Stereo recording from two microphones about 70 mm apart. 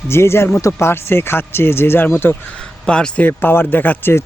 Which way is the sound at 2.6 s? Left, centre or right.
Centre.